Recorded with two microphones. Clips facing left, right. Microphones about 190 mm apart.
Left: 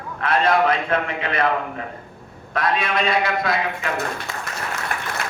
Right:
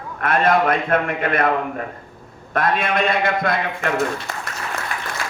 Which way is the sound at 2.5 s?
50° right (ahead or behind).